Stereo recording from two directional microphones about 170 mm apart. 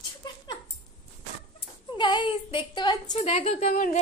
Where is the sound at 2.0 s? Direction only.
25° left (ahead or behind); by 4.0 s 45° left (ahead or behind).